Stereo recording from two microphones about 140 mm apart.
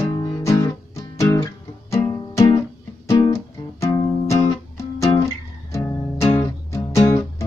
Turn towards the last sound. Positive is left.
turn(degrees=20)  # may be behind; listen again after turning